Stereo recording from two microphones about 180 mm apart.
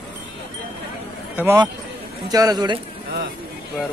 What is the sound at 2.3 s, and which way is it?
Speech, 20° right (ahead or behind).